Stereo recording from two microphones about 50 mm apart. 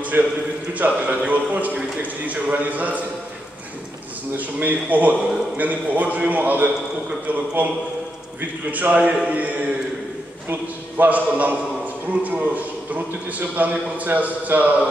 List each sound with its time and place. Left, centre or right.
0.1 s a man's voice: right
0.7 s a man's voice: right
4.4 s a man's voice: right